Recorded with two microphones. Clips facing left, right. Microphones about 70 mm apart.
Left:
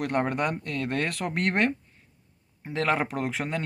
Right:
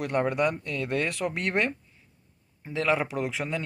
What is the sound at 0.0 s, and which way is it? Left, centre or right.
A man's voice, left.